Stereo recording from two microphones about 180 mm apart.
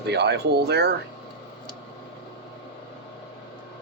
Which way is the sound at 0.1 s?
65° right (ahead or behind).